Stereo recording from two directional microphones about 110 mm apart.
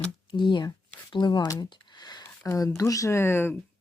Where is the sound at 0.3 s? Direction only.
45° left (ahead or behind).